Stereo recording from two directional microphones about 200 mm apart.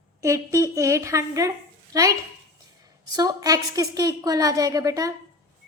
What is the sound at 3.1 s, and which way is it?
A woman's voice, 20° right (ahead or behind).